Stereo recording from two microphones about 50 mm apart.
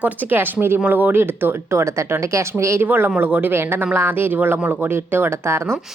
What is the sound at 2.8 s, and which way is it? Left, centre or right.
Speech, right.